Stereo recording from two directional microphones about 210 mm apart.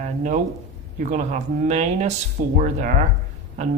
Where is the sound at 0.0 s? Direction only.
35° right (ahead or behind).